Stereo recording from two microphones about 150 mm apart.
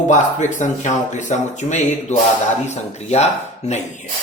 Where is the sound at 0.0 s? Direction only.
55° left (ahead or behind).